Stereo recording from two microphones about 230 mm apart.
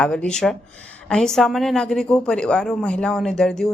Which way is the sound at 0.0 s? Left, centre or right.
Centre.